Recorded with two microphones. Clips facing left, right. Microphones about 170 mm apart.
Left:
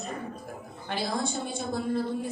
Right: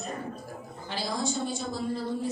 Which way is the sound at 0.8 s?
55° left (ahead or behind).